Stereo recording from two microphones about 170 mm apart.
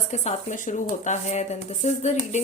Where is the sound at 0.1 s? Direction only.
45° left (ahead or behind).